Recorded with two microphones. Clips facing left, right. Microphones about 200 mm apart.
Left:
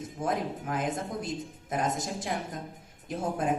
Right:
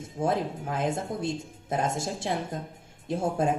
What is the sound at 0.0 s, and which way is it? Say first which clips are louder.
A man's voice: right 3 dB; 30° right (ahead or behind).